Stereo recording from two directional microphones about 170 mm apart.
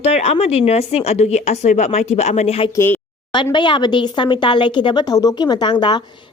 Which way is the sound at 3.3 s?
25° left (ahead or behind).